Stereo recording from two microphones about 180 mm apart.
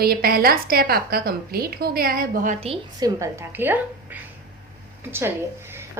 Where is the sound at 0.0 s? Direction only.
55° right (ahead or behind); by 2.7 s 40° right (ahead or behind).